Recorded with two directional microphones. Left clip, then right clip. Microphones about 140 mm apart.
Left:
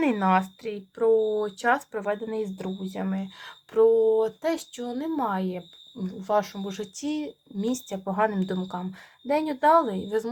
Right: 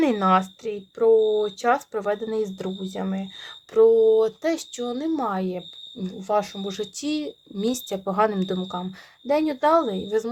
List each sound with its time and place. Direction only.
0.2 s speech: 30° right (ahead or behind)
1.1 s speech: 15° right (ahead or behind)
1.5 s speech: 25° right (ahead or behind)
6.1 s speech: 15° right (ahead or behind)
6.7 s speech: 60° right (ahead or behind)
7.9 s speech: 35° right (ahead or behind)